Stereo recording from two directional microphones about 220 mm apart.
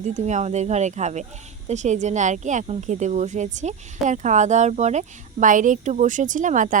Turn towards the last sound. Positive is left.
turn(degrees=-35)  # may be behind; listen again after turning